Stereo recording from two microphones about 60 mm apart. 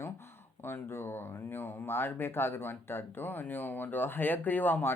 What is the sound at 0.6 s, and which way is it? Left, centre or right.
Speech, left.